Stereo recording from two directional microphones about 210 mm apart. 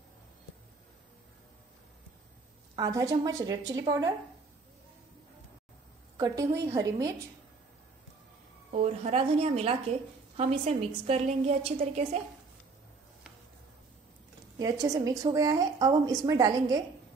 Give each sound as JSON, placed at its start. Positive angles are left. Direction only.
{"t": 2.7, "sound": "a woman's voice", "side_deg": -15}
{"t": 6.1, "sound": "a woman's voice", "side_deg": -15}
{"t": 8.7, "sound": "a woman's voice", "side_deg": -30}
{"t": 14.6, "sound": "a woman's voice", "side_deg": -15}